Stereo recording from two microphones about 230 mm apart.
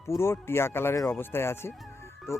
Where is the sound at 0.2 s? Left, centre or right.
Centre.